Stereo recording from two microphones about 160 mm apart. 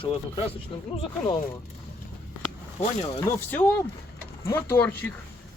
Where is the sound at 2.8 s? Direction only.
40° left (ahead or behind).